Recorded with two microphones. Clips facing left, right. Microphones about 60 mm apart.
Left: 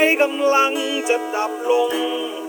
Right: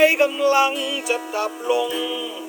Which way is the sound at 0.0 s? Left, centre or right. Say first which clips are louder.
Even; left.